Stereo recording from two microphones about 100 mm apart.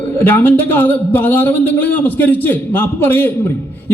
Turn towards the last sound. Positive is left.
turn(degrees=20)  # may be behind; listen again after turning